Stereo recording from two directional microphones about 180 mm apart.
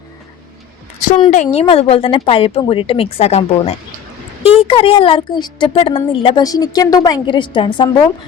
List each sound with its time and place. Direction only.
1.3 s a woman's voice: 40° left (ahead or behind)